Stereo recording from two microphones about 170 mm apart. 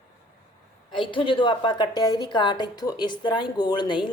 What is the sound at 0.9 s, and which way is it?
A woman's voice, 30° left (ahead or behind).